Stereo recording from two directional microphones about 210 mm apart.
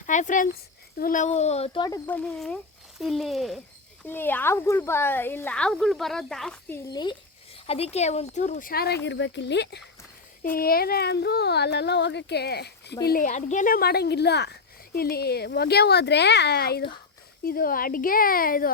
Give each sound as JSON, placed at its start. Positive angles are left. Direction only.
{"t": 0.0, "sound": "a sound", "side_deg": 35}
{"t": 0.9, "sound": "speech", "side_deg": 40}
{"t": 2.0, "sound": "speech", "side_deg": 5}
{"t": 6.9, "sound": "speech", "side_deg": 20}
{"t": 9.0, "sound": "speech", "side_deg": 60}
{"t": 13.1, "sound": "speech", "side_deg": 40}